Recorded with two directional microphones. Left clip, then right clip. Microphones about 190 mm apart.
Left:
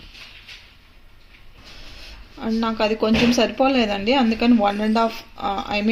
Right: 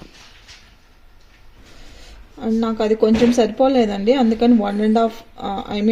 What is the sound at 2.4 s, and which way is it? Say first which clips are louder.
Speech: right 1 dB; 45° right (ahead or behind).